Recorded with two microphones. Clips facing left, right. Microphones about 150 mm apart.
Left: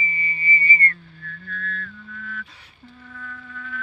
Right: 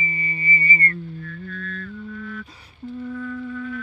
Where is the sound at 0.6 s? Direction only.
40° right (ahead or behind).